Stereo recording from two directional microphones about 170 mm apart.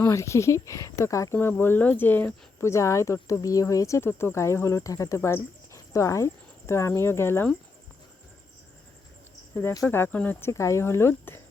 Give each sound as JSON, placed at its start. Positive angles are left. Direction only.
{"t": 0.0, "sound": "speech", "side_deg": 15}
{"t": 9.6, "sound": "speech", "side_deg": 10}